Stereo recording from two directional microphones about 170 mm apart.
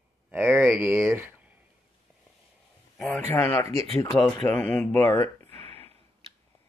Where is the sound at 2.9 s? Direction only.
5° left (ahead or behind).